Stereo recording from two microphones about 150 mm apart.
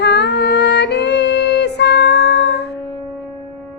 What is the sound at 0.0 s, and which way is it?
Music, 90° left.